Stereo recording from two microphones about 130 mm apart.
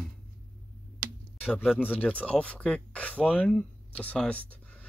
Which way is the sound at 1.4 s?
15° left (ahead or behind).